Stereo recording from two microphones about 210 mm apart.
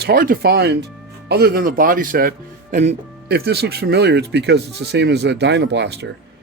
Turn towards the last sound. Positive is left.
turn(degrees=-55)  # may be behind; listen again after turning